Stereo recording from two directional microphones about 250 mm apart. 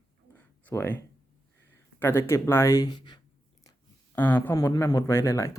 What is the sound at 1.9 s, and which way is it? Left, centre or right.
Speech, centre.